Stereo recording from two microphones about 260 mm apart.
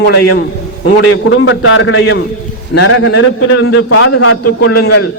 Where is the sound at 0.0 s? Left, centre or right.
Left.